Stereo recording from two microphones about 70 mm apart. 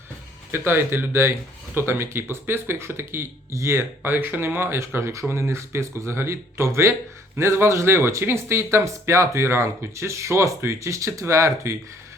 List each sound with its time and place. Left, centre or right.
0.5 s speech: right